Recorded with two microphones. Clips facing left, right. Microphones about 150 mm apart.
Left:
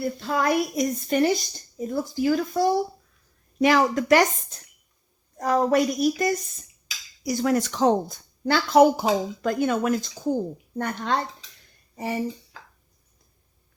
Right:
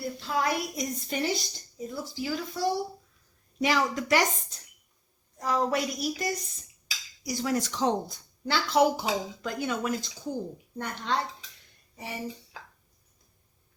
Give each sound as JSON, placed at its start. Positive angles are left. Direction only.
{"t": 0.0, "sound": "a woman's voice", "side_deg": 55}